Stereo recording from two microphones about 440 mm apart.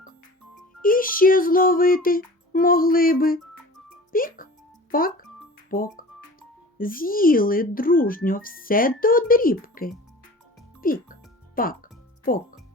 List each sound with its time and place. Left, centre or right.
0.8 s speech: centre
10.8 s music: centre
12.2 s speech: centre